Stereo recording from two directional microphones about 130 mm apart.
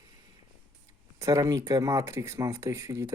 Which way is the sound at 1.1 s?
25° right (ahead or behind).